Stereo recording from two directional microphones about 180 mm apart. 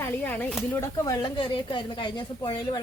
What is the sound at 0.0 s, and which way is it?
A woman's voice, 10° left (ahead or behind).